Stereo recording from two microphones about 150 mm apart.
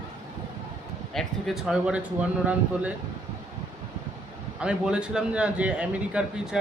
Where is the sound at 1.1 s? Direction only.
Centre (ahead or behind).